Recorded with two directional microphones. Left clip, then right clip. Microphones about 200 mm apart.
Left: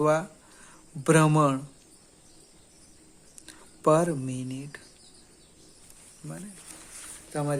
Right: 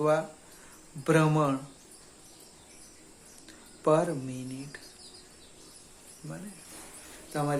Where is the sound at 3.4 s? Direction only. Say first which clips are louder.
Left 4 dB; 50° left (ahead or behind).